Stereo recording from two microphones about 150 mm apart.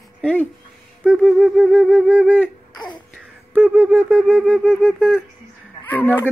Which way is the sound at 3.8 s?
5° left (ahead or behind).